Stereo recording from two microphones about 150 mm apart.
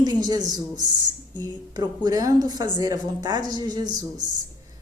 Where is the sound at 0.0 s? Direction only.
25° right (ahead or behind).